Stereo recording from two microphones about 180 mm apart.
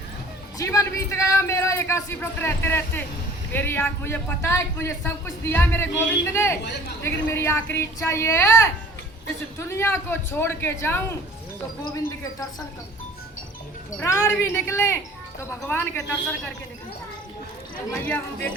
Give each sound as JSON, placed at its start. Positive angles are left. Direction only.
{"t": 0.6, "sound": "a man's voice", "side_deg": 15}
{"t": 14.0, "sound": "a man's voice", "side_deg": 15}
{"t": 18.0, "sound": "a man's voice", "side_deg": 10}